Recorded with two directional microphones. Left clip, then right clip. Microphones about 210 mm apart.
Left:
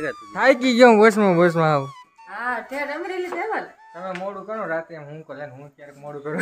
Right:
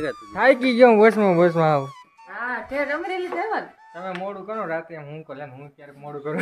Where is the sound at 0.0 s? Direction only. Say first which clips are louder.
Even; centre (ahead or behind).